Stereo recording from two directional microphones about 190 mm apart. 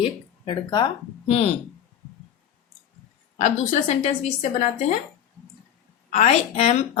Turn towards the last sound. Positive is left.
turn(degrees=35)  # may be behind; listen again after turning